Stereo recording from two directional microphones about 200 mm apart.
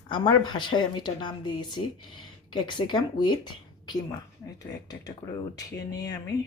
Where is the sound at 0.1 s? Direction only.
20° left (ahead or behind).